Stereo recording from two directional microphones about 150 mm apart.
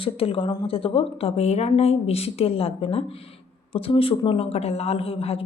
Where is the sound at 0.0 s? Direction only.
40° left (ahead or behind).